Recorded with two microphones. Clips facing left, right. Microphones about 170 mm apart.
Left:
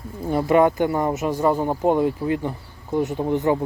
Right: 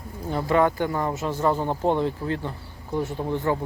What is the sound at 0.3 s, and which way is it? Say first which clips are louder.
Speech: left 4 dB; 15° left (ahead or behind).